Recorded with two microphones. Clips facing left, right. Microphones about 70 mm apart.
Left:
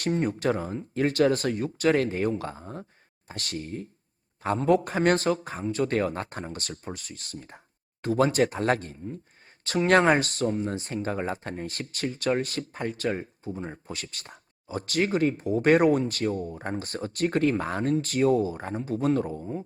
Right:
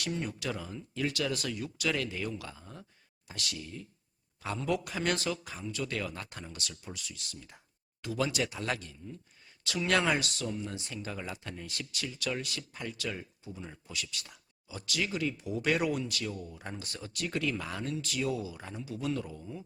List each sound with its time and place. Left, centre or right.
0.0 s speech: left